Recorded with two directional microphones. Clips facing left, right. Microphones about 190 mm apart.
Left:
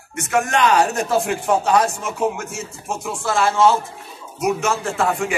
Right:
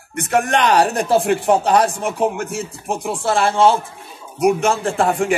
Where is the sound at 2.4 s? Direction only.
55° right (ahead or behind).